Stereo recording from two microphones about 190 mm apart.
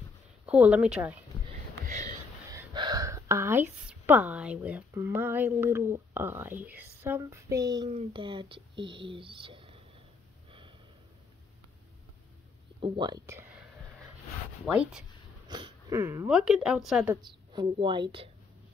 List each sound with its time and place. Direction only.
0.5 s speech: 5° right (ahead or behind)
2.7 s a woman's voice: 20° right (ahead or behind)
12.8 s speech: 25° right (ahead or behind)
14.7 s speech: 5° right (ahead or behind)
15.4 s a sound: 25° right (ahead or behind)
16.3 s speech: 5° right (ahead or behind)
17.1 s speech: 25° right (ahead or behind)